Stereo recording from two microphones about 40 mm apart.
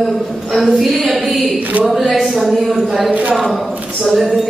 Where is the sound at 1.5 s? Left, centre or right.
Right.